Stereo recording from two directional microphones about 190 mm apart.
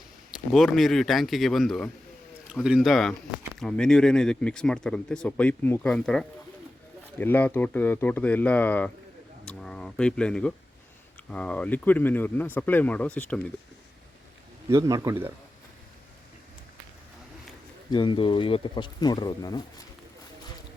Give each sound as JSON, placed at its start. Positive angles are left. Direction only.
{"t": 0.3, "sound": "speech", "side_deg": 0}
{"t": 14.7, "sound": "speech", "side_deg": -15}
{"t": 17.9, "sound": "speech", "side_deg": 25}